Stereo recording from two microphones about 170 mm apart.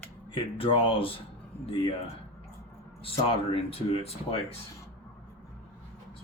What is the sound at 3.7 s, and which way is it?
Speech, 35° left (ahead or behind).